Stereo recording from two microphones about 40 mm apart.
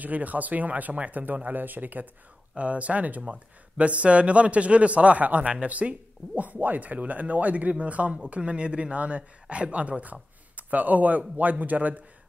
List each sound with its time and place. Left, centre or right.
0.0 s speech: right
2.5 s speech: right